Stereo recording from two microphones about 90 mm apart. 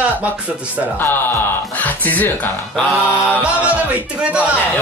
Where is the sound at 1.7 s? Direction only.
20° left (ahead or behind).